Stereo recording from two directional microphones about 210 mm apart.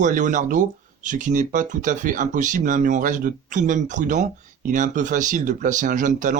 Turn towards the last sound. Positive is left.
turn(degrees=-40)  # may be behind; listen again after turning